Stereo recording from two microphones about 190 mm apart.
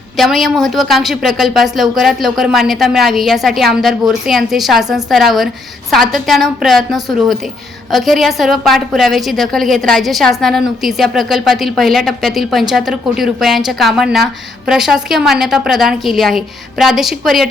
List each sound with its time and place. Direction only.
0.2 s a woman's voice: centre (ahead or behind)